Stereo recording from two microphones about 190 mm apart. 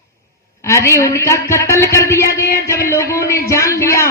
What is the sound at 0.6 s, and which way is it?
A woman's voice, 15° left (ahead or behind).